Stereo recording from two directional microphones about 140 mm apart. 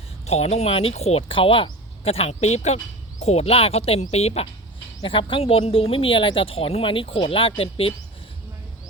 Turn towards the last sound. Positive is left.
turn(degrees=40)  # may be behind; listen again after turning